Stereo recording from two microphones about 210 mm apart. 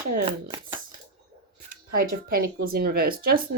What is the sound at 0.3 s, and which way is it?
Shuffling cards, 25° right (ahead or behind).